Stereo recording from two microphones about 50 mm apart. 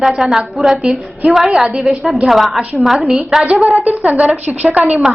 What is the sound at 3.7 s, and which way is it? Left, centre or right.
Speech, right.